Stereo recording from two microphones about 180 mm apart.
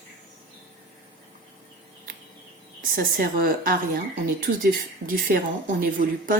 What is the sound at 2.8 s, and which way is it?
Speech, 50° right (ahead or behind).